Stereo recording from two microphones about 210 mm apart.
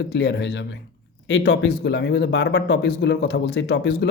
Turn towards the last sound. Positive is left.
turn(degrees=50)  # may be behind; listen again after turning